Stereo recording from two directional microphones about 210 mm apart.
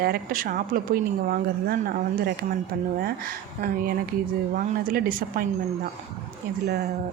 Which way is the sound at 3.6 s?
45° right (ahead or behind).